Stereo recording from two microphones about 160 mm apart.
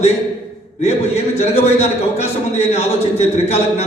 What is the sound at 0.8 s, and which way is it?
A man's voice, 40° left (ahead or behind).